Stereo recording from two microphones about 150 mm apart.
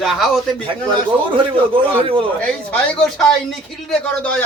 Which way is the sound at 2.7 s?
5° left (ahead or behind).